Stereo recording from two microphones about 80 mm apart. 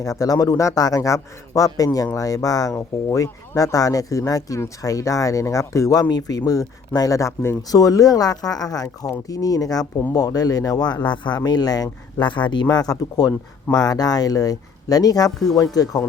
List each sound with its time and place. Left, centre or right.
0.0 s speech: left
11.3 s speech: left
12.2 s a man's voice: left
12.6 s speech: left